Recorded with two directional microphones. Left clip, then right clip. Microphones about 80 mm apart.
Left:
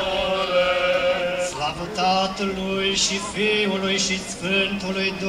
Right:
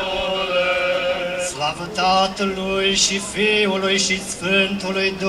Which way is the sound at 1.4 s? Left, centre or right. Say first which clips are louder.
Right 2 dB; right.